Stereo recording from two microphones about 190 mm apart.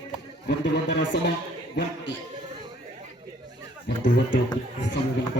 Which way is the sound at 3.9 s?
65° left (ahead or behind).